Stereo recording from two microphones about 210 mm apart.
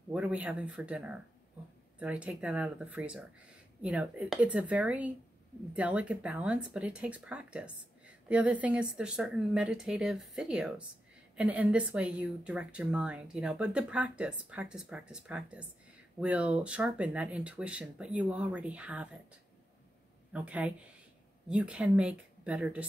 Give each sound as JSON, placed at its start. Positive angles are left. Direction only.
{"t": 0.1, "sound": "speech", "side_deg": -5}
{"t": 20.3, "sound": "speech", "side_deg": -5}